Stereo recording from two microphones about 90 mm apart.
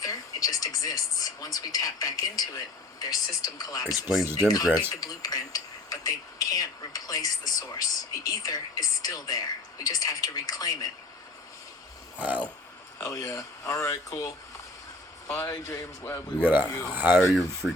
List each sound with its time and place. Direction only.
0.0 s speech: 40° left (ahead or behind)
12.2 s dog: 15° right (ahead or behind)
13.0 s speech: 40° left (ahead or behind)
15.3 s speech: 40° left (ahead or behind)
16.9 s speech: 20° right (ahead or behind)
17.2 s speech: centre (ahead or behind)